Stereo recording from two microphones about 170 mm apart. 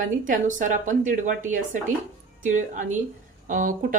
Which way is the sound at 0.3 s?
50° right (ahead or behind).